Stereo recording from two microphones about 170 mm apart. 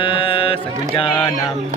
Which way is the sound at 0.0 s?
30° left (ahead or behind).